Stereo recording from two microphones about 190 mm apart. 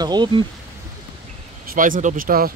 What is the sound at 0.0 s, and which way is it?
Speech, 20° right (ahead or behind).